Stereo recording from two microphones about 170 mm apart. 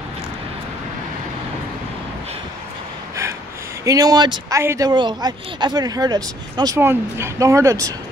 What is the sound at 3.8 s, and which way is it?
Speech, 20° right (ahead or behind).